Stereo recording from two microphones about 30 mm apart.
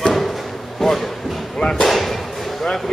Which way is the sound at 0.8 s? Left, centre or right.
Centre.